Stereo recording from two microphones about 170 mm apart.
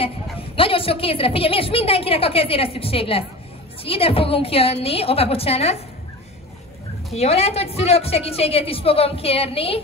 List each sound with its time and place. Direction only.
0.6 s a woman's voice: 30° left (ahead or behind)
7.2 s a woman's voice: 35° left (ahead or behind)